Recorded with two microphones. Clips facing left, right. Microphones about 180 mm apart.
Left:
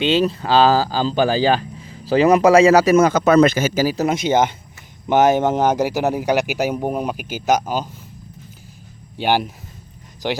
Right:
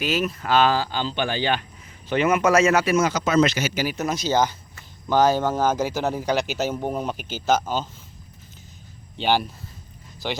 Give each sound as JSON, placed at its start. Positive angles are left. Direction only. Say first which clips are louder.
{"t": 0.0, "sound": "speech", "louder": "left 7 dB", "side_deg": 30}
{"t": 2.9, "sound": "speech", "louder": "left 7 dB", "side_deg": 55}
{"t": 3.9, "sound": "speech", "louder": "left 5 dB", "side_deg": 25}
{"t": 9.1, "sound": "speech", "louder": "left 3 dB", "side_deg": 15}